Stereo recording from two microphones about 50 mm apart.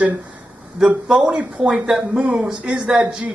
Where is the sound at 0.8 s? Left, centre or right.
Centre.